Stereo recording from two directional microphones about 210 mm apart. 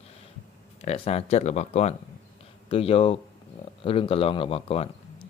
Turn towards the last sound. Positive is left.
turn(degrees=25)  # may be behind; listen again after turning